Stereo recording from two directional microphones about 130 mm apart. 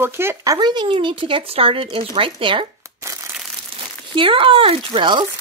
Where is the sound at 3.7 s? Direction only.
45° right (ahead or behind).